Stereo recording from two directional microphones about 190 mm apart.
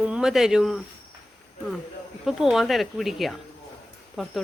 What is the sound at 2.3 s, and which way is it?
Speech, centre (ahead or behind).